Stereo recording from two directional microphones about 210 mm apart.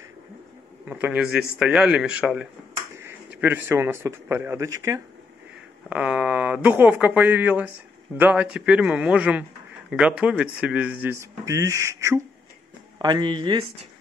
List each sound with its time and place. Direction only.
0.8 s a man's voice: 5° right (ahead or behind)